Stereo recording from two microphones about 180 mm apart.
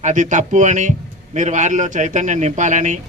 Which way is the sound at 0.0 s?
45° right (ahead or behind).